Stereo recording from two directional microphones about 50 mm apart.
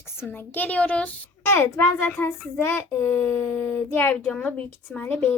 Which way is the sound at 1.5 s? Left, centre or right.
Left.